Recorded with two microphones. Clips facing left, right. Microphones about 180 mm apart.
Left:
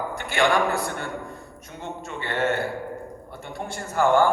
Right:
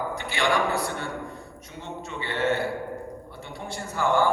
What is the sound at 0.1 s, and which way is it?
A man's voice, 50° left (ahead or behind).